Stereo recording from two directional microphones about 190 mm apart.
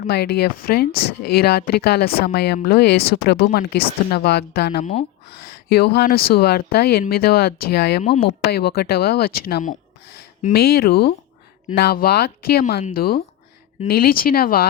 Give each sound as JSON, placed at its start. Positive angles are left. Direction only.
{"t": 0.1, "sound": "speech", "side_deg": 60}
{"t": 0.9, "sound": "speech", "side_deg": 30}
{"t": 1.2, "sound": "speech", "side_deg": 55}
{"t": 4.8, "sound": "speech", "side_deg": 35}
{"t": 5.5, "sound": "speech", "side_deg": 55}
{"t": 8.0, "sound": "speech", "side_deg": 35}
{"t": 8.4, "sound": "speech", "side_deg": 55}